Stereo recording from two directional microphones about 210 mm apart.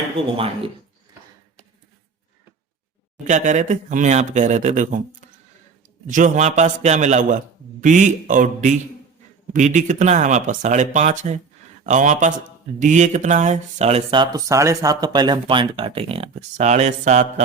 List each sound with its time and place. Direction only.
0.2 s speech: 25° right (ahead or behind)
3.2 s a man's voice: 35° right (ahead or behind)
6.1 s a man's voice: 35° right (ahead or behind)